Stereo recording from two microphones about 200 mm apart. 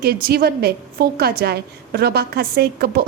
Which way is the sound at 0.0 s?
50° right (ahead or behind).